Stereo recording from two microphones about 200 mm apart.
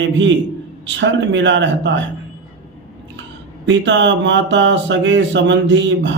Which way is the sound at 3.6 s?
65° right (ahead or behind).